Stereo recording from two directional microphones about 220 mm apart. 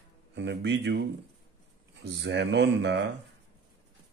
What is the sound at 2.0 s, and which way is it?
Speech, 50° right (ahead or behind).